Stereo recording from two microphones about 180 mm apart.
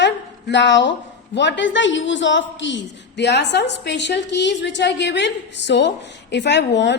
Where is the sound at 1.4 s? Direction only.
85° left.